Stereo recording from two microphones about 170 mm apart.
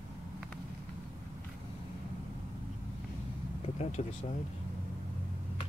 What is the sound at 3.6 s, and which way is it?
Vehicle, 40° left (ahead or behind).